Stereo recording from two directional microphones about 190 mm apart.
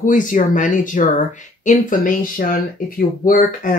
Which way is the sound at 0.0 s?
45° left (ahead or behind).